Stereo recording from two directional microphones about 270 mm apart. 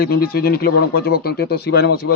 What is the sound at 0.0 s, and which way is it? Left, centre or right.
A man's voice, left.